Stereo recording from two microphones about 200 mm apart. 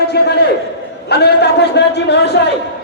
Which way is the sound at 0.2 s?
55° left (ahead or behind).